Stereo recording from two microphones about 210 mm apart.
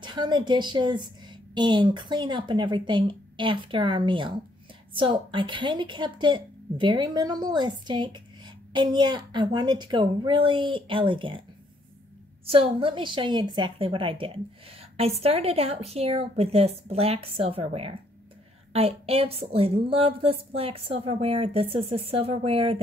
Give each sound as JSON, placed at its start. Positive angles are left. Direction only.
{"t": 0.0, "sound": "a woman's voice", "side_deg": -20}
{"t": 12.4, "sound": "a woman's voice", "side_deg": -25}